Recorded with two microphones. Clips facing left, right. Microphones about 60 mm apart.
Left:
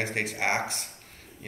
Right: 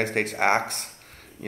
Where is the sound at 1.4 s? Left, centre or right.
Right.